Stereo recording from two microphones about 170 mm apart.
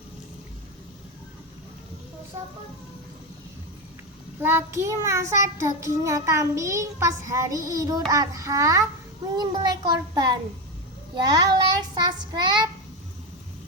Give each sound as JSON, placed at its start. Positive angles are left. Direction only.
{"t": 4.4, "sound": "child singing", "side_deg": -15}
{"t": 8.1, "sound": "a child's voice", "side_deg": -20}